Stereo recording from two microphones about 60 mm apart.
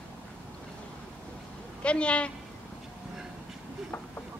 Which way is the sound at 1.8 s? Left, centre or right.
Centre.